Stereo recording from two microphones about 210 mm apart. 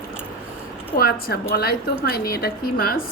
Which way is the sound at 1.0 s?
45° left (ahead or behind).